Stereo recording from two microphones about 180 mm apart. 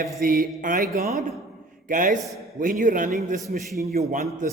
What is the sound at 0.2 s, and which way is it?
A man's voice, 55° right (ahead or behind).